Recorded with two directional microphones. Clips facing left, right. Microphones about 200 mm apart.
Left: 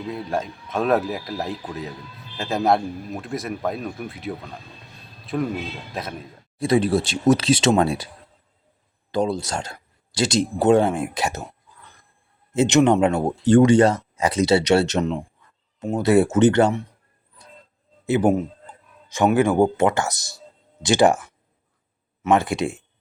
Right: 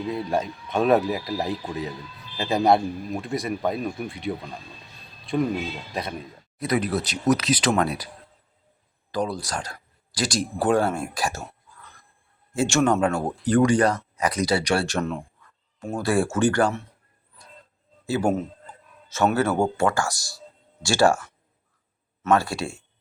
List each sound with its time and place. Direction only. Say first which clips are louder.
0.1 s a man's voice: even; centre (ahead or behind)
6.6 s speech: left 5 dB; 30° left (ahead or behind)
9.1 s speech: left 4 dB; 25° left (ahead or behind)
18.0 s speech: left 4 dB; 20° left (ahead or behind)